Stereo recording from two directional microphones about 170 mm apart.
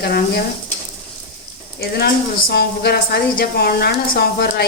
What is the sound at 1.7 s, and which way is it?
A woman's voice, 75° left (ahead or behind).